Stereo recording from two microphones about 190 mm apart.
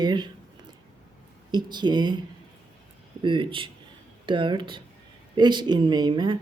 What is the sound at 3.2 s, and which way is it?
Speech, 25° right (ahead or behind).